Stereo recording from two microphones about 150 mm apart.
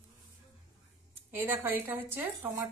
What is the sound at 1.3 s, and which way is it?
A woman's voice, 15° right (ahead or behind).